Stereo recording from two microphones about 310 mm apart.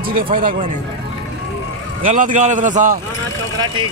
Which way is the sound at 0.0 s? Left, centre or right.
Right.